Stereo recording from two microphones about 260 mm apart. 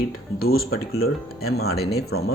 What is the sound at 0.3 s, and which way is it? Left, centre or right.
Speech, left.